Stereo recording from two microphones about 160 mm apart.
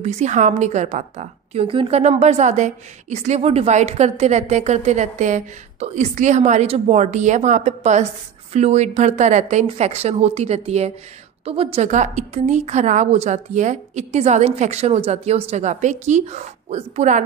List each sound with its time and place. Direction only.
0.0 s a woman's voice: 45° right (ahead or behind)